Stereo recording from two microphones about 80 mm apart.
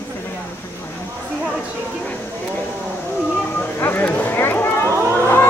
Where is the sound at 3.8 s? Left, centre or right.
Left.